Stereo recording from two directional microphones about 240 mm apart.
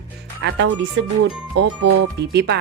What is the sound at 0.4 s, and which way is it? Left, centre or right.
Speech, right.